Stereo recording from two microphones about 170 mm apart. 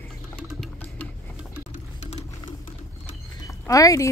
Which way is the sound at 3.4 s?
20° left (ahead or behind).